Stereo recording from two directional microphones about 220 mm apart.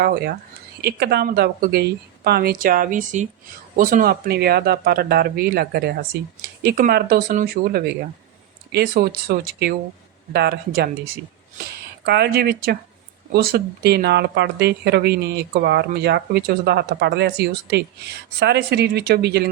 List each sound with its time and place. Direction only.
0.0 s speech: 45° right (ahead or behind)